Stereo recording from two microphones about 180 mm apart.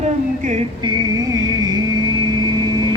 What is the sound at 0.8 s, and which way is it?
Vehicle, 25° right (ahead or behind).